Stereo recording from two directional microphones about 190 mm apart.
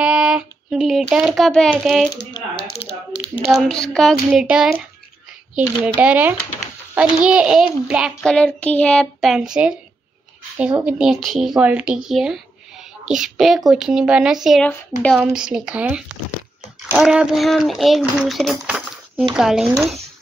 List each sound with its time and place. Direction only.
0.0 s a child's voice: 5° right (ahead or behind)
2.3 s a sound: 30° left (ahead or behind)
3.4 s child singing: centre (ahead or behind)
5.9 s speech: 10° right (ahead or behind)
7.0 s child singing: 5° right (ahead or behind)
10.8 s child singing: 5° right (ahead or behind)
14.7 s speech: 10° left (ahead or behind)
15.1 s child singing: 5° right (ahead or behind)
16.9 s speech: 5° right (ahead or behind)
19.3 s child singing: 5° right (ahead or behind)